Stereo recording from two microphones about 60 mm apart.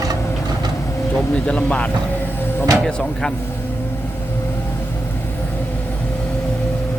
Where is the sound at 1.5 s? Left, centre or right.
Centre.